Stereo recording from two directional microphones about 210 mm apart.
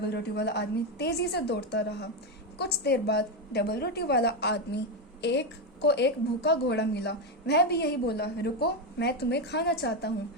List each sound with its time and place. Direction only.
0.0 s a woman's voice: 50° left (ahead or behind)